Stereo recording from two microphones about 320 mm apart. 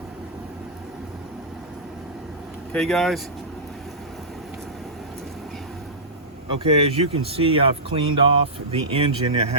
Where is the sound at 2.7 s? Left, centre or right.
Centre.